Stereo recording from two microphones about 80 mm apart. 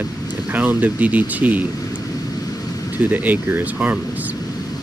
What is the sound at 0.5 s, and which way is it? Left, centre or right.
Speech, right.